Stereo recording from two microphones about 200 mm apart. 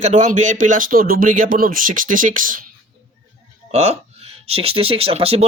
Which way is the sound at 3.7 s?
30° right (ahead or behind).